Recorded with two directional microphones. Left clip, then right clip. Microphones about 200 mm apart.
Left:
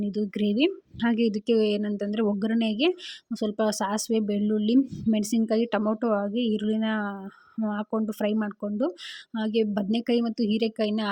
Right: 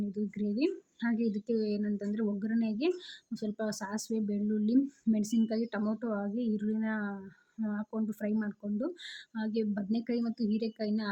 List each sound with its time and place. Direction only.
0.0 s speech: 40° left (ahead or behind)